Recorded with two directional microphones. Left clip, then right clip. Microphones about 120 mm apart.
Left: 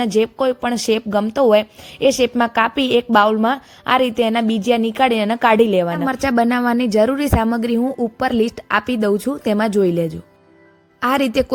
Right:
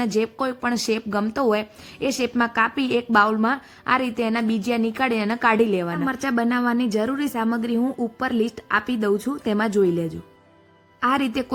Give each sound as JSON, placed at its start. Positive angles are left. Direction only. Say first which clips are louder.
{"t": 0.0, "sound": "a woman's voice", "louder": "left 6 dB", "side_deg": 30}